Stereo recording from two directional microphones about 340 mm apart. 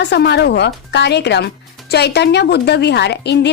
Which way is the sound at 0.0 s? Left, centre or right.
Left.